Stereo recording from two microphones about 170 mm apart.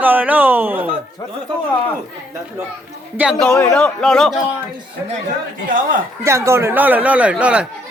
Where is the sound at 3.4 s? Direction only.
10° left (ahead or behind).